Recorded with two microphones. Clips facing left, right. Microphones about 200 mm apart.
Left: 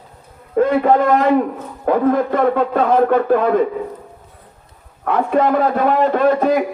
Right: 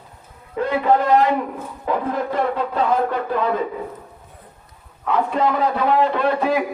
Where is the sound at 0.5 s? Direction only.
50° left (ahead or behind).